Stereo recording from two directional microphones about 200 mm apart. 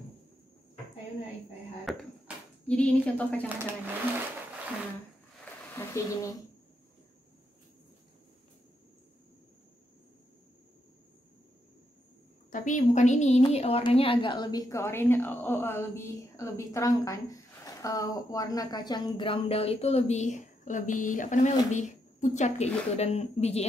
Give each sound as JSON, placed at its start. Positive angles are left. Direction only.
{"t": 1.9, "sound": "a sound", "side_deg": 0}
{"t": 3.4, "sound": "speech", "side_deg": -10}
{"t": 5.8, "sound": "speech", "side_deg": 15}
{"t": 12.4, "sound": "a woman's voice", "side_deg": 40}